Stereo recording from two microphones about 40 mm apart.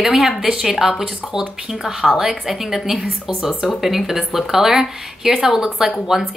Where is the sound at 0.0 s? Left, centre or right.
Centre.